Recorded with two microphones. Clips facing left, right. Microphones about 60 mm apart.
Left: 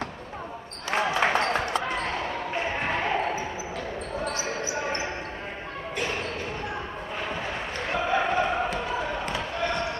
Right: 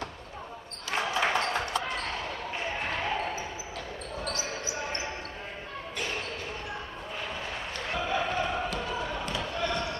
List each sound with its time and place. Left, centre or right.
1.0 s basketball bounce: left
7.9 s basketball bounce: left